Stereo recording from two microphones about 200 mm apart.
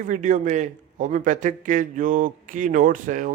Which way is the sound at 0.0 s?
40° right (ahead or behind).